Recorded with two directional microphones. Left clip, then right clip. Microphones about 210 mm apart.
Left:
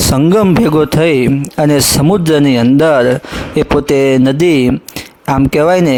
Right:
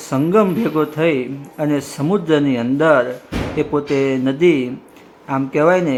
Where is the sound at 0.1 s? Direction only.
50° left (ahead or behind).